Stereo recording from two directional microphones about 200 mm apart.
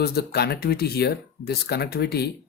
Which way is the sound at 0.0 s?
55° left (ahead or behind).